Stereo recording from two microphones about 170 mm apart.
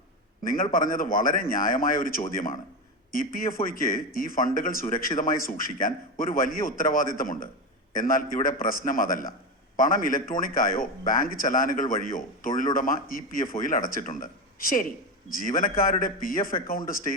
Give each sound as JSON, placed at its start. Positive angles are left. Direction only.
{"t": 0.4, "sound": "speech", "side_deg": 55}